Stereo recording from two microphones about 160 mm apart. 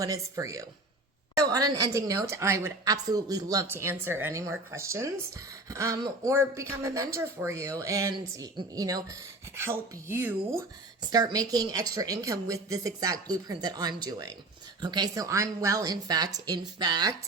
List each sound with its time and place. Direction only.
0.0 s a woman's voice: 20° right (ahead or behind)
11.0 s a woman's voice: 25° right (ahead or behind)